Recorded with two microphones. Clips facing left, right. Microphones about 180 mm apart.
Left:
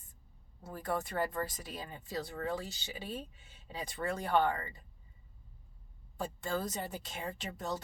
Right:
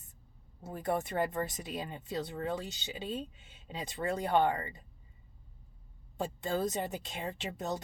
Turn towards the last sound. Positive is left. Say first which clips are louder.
# right 2 dB
turn(degrees=-25)  # may be behind; listen again after turning